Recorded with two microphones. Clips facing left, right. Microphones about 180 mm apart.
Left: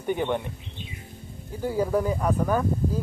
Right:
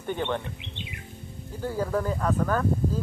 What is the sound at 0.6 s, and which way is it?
Bird, 75° right (ahead or behind).